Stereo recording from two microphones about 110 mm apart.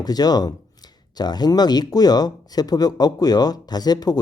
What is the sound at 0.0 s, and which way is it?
Speech, 35° left (ahead or behind).